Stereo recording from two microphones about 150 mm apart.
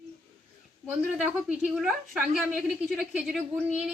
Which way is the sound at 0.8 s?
10° right (ahead or behind).